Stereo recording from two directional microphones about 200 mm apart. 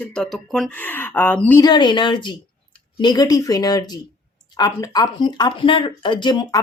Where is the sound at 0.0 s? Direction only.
5° left (ahead or behind).